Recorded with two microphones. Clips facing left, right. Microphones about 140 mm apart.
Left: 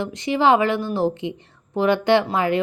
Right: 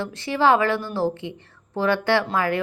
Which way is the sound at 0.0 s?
15° left (ahead or behind).